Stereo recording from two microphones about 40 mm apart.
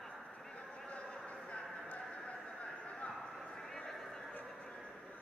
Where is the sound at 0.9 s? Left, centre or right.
Left.